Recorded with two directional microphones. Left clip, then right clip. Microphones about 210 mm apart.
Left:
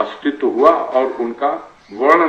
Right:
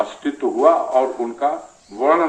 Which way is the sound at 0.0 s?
60° right (ahead or behind).